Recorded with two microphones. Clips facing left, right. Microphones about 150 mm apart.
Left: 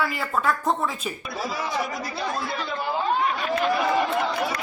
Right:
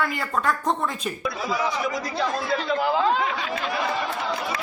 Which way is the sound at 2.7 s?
90° right.